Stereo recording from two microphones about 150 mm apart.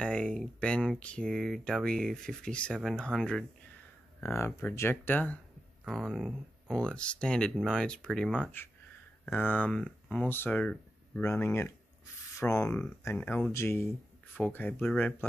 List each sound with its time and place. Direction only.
0.0 s speech: 5° left (ahead or behind)
4.3 s speech: 15° left (ahead or behind)
5.9 s speech: centre (ahead or behind)